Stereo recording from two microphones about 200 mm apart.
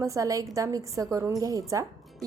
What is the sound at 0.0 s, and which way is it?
A woman's voice, 15° right (ahead or behind).